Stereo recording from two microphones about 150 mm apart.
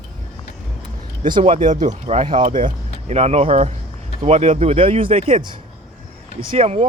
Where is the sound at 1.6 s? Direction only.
55° right (ahead or behind); by 5.5 s 40° right (ahead or behind).